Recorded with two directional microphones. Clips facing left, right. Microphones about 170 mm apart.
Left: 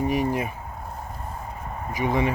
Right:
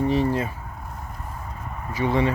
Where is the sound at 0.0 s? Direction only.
15° left (ahead or behind).